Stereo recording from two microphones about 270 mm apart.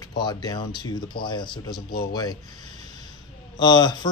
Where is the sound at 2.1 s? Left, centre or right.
Centre.